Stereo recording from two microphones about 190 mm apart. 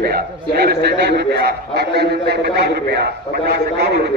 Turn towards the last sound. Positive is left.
turn(degrees=-60)  # may be behind; listen again after turning